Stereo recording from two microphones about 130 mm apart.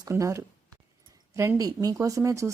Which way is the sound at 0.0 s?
25° right (ahead or behind).